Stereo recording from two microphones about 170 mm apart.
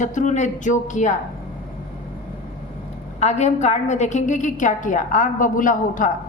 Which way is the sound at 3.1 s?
40° left (ahead or behind).